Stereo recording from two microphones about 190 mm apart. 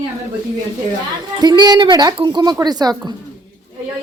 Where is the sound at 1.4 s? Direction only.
20° right (ahead or behind).